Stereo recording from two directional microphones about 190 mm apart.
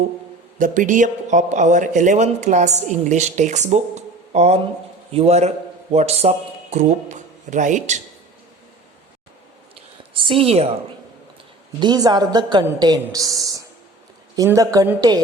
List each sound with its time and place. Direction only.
0.6 s a man's voice: 45° right (ahead or behind)
10.2 s a woman's voice: 25° right (ahead or behind)
11.8 s a woman's voice: 20° right (ahead or behind)